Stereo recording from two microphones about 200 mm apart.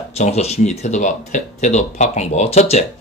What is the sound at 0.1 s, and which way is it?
Speech, 30° left (ahead or behind).